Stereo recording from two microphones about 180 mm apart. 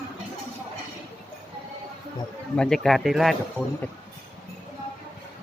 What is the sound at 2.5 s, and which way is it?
Speech, 5° left (ahead or behind).